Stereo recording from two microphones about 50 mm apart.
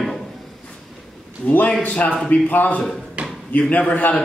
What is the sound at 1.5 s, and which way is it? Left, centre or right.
A man's voice, left.